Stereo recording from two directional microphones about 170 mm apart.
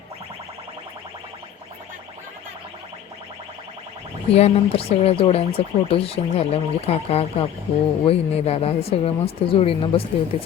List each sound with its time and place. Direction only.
4.4 s speech: 35° left (ahead or behind)